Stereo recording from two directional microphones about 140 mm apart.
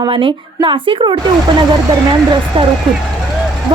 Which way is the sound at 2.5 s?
35° right (ahead or behind).